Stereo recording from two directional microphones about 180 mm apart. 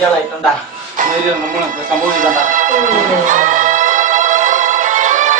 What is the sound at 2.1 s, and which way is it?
Music, 50° right (ahead or behind).